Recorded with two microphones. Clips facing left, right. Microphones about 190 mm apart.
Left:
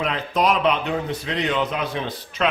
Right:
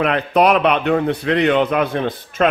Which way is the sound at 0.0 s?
65° right (ahead or behind).